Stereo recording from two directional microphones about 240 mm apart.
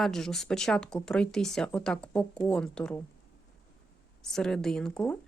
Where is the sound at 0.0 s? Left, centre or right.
Centre.